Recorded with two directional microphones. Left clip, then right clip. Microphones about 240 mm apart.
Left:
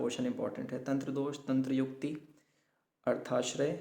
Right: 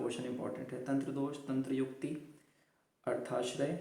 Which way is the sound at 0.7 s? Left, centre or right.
Left.